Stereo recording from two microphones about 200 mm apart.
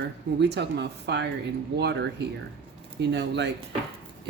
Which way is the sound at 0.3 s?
60° right (ahead or behind).